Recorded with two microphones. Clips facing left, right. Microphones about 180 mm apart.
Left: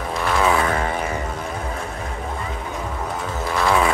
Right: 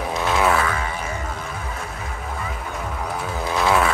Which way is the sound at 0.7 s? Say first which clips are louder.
Left 4 dB; 40° left (ahead or behind).